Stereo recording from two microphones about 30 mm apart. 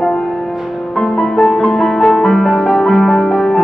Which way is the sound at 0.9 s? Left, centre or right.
Centre.